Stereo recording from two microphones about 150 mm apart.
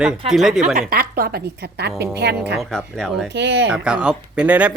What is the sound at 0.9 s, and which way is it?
A woman's voice, 85° right.